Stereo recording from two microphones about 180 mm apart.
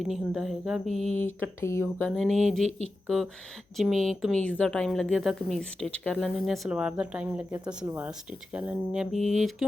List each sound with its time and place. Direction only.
0.0 s a woman's voice: centre (ahead or behind)
1.2 s speech: 15° left (ahead or behind)
2.0 s a woman's voice: centre (ahead or behind)
2.6 s speech: 35° right (ahead or behind)
3.8 s a woman's voice: centre (ahead or behind)